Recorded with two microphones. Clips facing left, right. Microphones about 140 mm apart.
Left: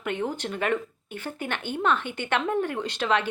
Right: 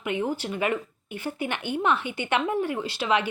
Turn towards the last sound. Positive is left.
turn(degrees=-10)  # may be behind; listen again after turning